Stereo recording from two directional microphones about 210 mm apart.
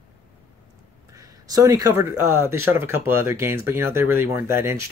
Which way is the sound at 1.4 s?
15° right (ahead or behind).